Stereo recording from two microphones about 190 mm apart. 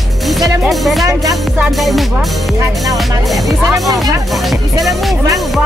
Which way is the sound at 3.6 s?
20° right (ahead or behind).